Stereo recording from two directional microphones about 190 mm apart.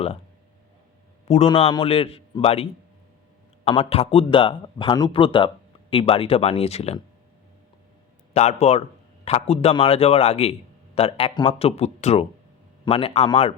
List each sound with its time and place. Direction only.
1.5 s speech: 25° left (ahead or behind)
8.3 s speech: 35° left (ahead or behind)